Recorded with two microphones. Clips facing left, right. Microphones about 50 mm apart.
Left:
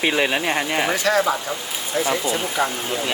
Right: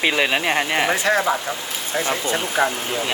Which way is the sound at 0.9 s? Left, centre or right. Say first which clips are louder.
Left 2 dB; right.